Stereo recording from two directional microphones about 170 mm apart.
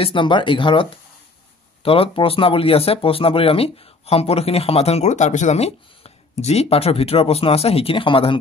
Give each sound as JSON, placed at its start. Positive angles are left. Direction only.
{"t": 0.0, "sound": "speech", "side_deg": 30}